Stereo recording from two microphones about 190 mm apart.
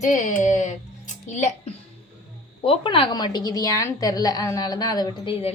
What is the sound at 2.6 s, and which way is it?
A woman's voice, 30° left (ahead or behind).